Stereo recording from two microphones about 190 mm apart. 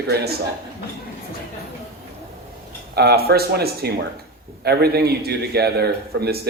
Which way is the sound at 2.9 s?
60° right (ahead or behind).